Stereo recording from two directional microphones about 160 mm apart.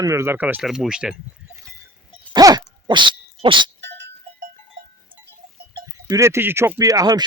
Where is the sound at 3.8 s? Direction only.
90° right.